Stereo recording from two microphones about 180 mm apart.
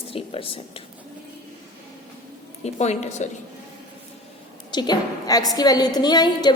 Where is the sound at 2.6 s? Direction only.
40° left (ahead or behind).